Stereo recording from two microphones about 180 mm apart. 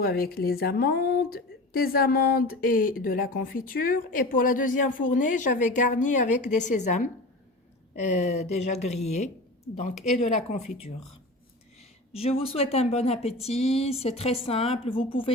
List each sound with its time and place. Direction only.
0.0 s a woman's voice: 60° left (ahead or behind); by 10.7 s 40° left (ahead or behind)
11.8 s a woman's voice: 35° left (ahead or behind)